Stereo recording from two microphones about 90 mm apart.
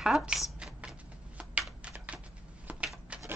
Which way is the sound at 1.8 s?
15° right (ahead or behind).